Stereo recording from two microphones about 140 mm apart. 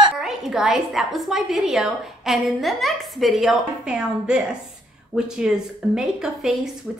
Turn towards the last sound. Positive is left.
turn(degrees=-5)  # may be behind; listen again after turning